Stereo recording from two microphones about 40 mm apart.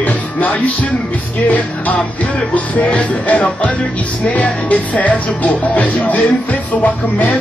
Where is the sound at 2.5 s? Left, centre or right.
Left.